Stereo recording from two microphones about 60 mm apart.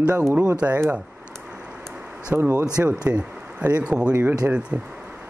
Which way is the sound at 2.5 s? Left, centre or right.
Right.